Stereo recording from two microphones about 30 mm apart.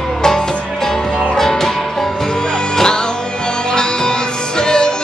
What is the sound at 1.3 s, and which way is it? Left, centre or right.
Music, centre.